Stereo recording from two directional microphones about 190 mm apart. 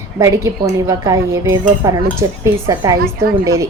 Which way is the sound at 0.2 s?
15° right (ahead or behind).